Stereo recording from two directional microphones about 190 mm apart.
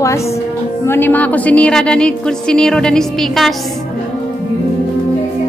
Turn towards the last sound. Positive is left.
turn(degrees=0)  # may be behind; listen again after turning